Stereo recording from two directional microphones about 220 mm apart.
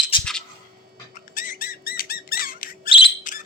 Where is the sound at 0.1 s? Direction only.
25° left (ahead or behind).